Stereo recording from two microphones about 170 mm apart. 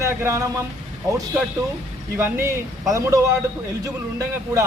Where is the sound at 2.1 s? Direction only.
15° right (ahead or behind).